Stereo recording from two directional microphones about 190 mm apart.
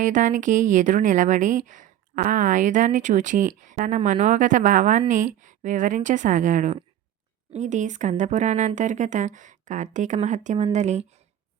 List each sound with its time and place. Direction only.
0.0 s a woman's voice: 40° right (ahead or behind)